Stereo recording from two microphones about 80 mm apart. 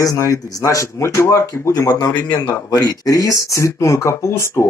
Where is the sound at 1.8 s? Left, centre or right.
Left.